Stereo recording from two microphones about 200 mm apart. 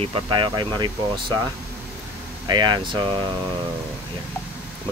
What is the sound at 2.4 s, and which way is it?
Speech, 20° right (ahead or behind).